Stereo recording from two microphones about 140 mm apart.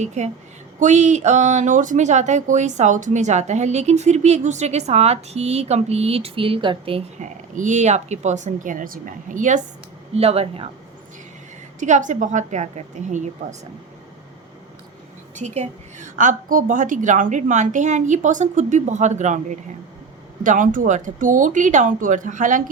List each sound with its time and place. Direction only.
0.0 s speech: 55° right (ahead or behind); by 7.0 s 40° right (ahead or behind)
7.2 s speech: 65° right (ahead or behind)
10.2 s speech: 45° right (ahead or behind)
11.8 s speech: 60° right (ahead or behind)
15.4 s speech: 55° right (ahead or behind)